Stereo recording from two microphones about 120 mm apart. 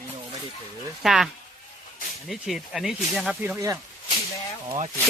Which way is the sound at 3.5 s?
30° right (ahead or behind).